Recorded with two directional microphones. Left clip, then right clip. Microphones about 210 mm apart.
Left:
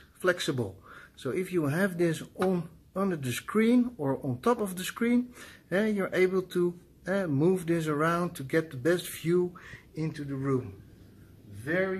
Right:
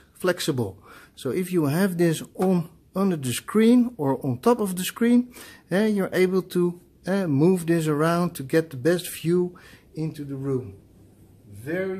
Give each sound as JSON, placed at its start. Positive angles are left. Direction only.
{"t": 0.2, "sound": "speech", "side_deg": -50}